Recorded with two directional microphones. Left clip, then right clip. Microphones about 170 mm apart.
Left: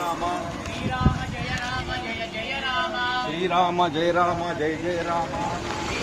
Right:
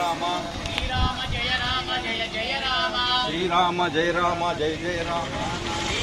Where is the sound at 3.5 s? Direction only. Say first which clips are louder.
Left 1 dB; 50° left (ahead or behind).